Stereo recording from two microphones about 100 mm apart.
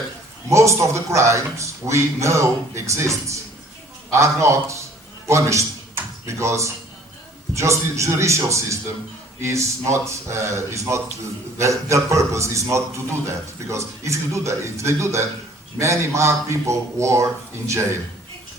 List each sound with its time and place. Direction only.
0.5 s a man's voice: 30° right (ahead or behind)